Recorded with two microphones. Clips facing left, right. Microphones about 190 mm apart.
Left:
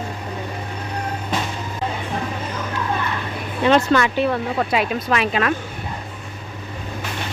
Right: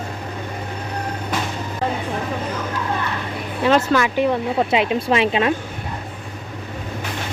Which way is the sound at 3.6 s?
5° right (ahead or behind).